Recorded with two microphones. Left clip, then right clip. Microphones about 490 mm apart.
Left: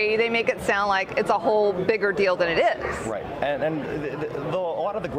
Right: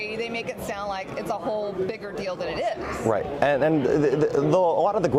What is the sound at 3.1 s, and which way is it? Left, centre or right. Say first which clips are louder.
Speech: right 7 dB; right.